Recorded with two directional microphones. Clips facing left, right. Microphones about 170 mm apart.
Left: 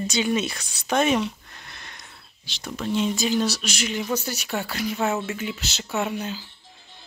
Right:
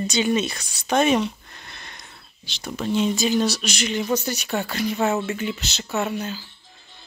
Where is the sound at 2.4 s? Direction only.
Centre (ahead or behind); by 6.4 s 15° left (ahead or behind).